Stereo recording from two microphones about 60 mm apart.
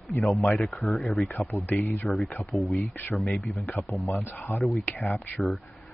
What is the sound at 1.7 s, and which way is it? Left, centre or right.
Speech, left.